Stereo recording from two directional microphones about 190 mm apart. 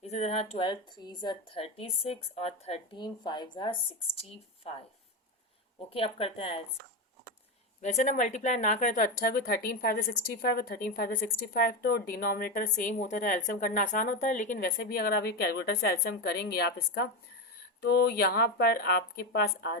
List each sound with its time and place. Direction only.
0.0 s a woman's voice: 35° left (ahead or behind)
5.9 s a woman's voice: 30° left (ahead or behind)
7.8 s speech: 40° left (ahead or behind); by 19.7 s 55° left (ahead or behind)